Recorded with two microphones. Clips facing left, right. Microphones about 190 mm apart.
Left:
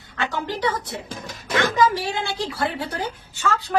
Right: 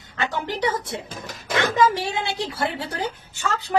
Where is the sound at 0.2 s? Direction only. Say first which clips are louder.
Even; 20° right (ahead or behind).